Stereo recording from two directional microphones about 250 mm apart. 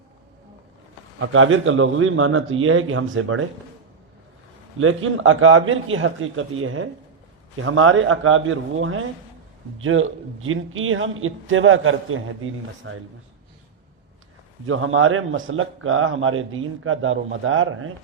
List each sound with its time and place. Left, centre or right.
1.2 s a man's voice: right
4.8 s a man's voice: right
14.7 s a man's voice: right